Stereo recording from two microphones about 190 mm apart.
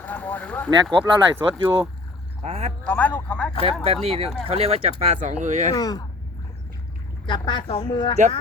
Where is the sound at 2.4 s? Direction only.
35° right (ahead or behind).